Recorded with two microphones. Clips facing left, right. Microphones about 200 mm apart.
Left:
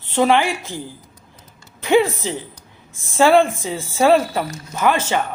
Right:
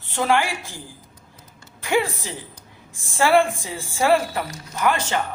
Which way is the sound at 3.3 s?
20° left (ahead or behind).